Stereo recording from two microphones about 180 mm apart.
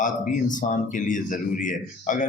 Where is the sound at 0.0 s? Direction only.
45° left (ahead or behind).